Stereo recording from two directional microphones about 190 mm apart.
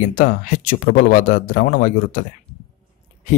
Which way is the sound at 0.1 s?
45° left (ahead or behind).